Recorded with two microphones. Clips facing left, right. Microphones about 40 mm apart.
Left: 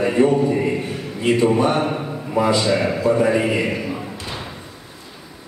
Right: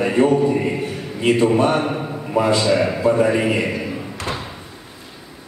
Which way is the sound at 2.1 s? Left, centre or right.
Centre.